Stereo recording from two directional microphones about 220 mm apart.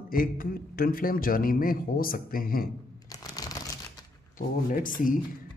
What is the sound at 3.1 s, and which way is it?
Shuffling cards, 15° left (ahead or behind).